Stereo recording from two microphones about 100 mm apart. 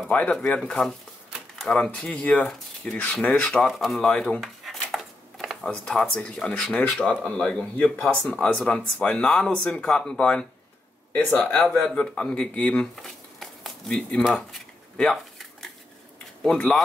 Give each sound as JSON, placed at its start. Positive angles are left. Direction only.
{"t": 0.1, "sound": "speech", "side_deg": 15}
{"t": 0.6, "sound": "speech", "side_deg": 5}
{"t": 3.7, "sound": "speech", "side_deg": 0}
{"t": 11.7, "sound": "speech", "side_deg": 5}
{"t": 12.9, "sound": "a sound", "side_deg": 0}
{"t": 16.4, "sound": "speech", "side_deg": 5}